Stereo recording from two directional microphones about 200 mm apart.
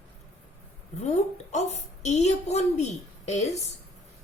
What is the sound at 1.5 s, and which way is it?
A woman's voice, 35° left (ahead or behind).